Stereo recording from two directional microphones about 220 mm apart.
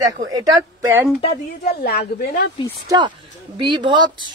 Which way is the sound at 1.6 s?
45° left (ahead or behind).